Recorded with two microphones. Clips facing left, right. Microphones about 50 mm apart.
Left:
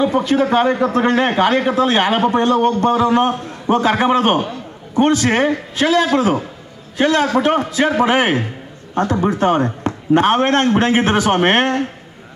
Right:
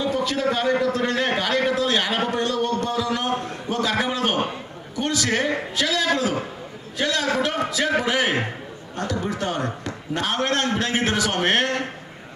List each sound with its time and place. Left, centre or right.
0.0 s a man's voice: left